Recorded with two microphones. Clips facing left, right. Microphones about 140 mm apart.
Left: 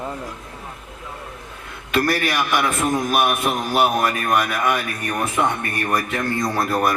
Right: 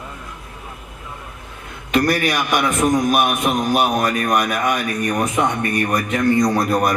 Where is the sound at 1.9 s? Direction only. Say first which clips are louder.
Right 2 dB; 20° right (ahead or behind).